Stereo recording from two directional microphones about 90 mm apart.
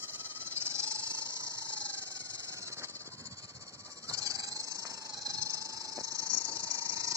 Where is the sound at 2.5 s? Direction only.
35° right (ahead or behind).